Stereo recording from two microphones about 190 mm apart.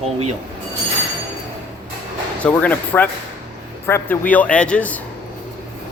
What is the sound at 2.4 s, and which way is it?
Speech, 10° left (ahead or behind).